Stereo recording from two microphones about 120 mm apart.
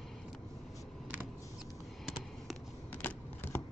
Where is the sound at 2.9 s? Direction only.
15° left (ahead or behind).